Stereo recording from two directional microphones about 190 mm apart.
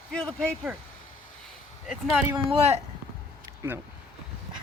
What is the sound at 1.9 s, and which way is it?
Speech, 5° right (ahead or behind).